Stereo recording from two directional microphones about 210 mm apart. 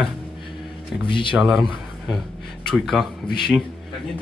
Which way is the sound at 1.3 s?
Centre (ahead or behind).